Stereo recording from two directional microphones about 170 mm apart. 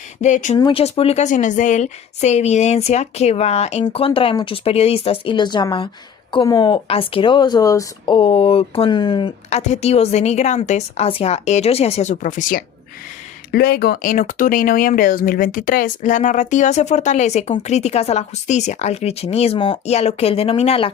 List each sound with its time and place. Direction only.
0.2 s speech: 45° left (ahead or behind)
0.5 s a woman's voice: 35° left (ahead or behind)
9.5 s a woman's voice: 40° left (ahead or behind)
13.5 s a woman's voice: 65° left (ahead or behind); by 20.9 s 35° left (ahead or behind)